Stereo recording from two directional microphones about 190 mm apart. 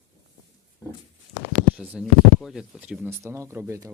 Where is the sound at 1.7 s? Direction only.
5° right (ahead or behind).